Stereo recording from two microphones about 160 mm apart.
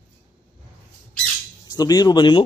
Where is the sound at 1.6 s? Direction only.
25° left (ahead or behind).